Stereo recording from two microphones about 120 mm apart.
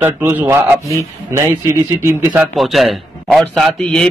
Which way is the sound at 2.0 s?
15° right (ahead or behind).